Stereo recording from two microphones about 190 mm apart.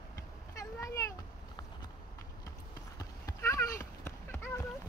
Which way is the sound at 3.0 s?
15° left (ahead or behind).